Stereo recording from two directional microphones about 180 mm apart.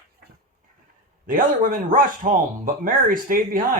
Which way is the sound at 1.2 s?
50° right (ahead or behind).